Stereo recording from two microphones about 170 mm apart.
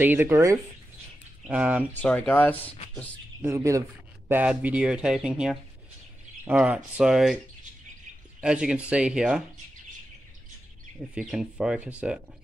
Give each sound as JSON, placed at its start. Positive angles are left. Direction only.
{"t": 0.0, "sound": "speech", "side_deg": -10}
{"t": 2.0, "sound": "speech", "side_deg": 5}
{"t": 3.4, "sound": "speech", "side_deg": -15}
{"t": 8.4, "sound": "speech", "side_deg": -5}
{"t": 11.1, "sound": "speech", "side_deg": -5}